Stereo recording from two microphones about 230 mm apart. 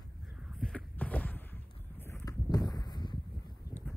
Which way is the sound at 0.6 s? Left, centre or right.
Centre.